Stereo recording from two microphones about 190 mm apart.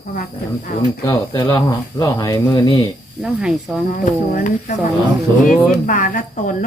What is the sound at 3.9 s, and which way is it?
Speech, 45° left (ahead or behind).